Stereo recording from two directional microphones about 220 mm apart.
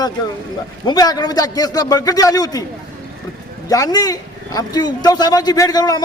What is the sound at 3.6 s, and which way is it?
A man's voice, 15° left (ahead or behind).